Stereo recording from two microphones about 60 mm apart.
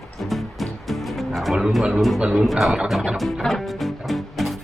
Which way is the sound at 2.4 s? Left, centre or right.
Centre.